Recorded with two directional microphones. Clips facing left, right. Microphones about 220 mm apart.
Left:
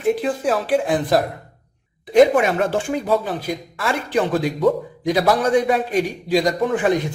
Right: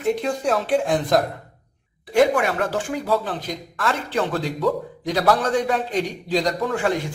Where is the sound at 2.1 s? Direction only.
20° left (ahead or behind).